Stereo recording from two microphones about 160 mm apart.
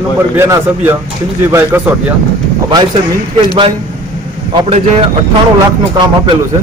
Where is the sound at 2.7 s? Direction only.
30° right (ahead or behind).